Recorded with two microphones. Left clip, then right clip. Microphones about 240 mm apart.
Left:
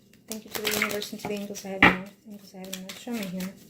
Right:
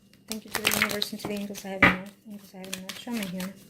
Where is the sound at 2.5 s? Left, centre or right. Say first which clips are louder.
Right 1 dB; right.